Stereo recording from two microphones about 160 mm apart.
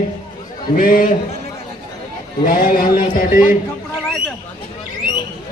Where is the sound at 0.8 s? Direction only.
60° left (ahead or behind).